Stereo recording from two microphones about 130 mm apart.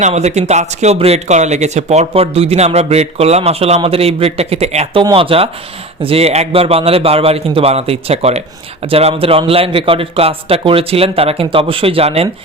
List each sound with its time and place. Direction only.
0.0 s a man's voice: 60° right (ahead or behind)